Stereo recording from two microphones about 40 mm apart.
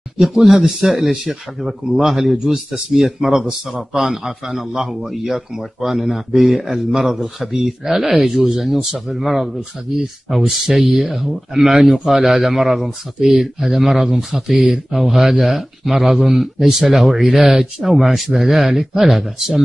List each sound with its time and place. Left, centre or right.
0.2 s a man's voice: centre
17.8 s a man's voice: centre